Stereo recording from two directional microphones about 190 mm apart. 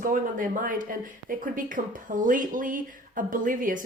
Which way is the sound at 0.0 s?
45° right (ahead or behind).